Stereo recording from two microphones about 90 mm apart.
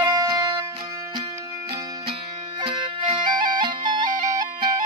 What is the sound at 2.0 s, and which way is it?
Music, 65° right (ahead or behind).